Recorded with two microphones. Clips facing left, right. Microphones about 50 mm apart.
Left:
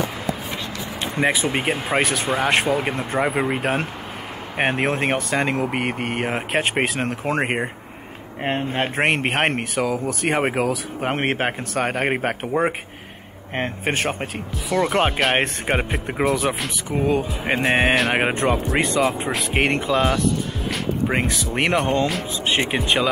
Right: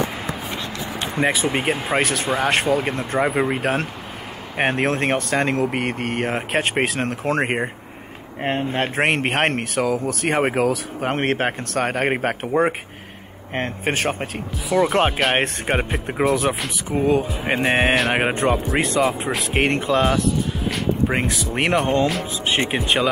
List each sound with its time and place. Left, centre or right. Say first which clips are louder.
1.1 s speech: even; centre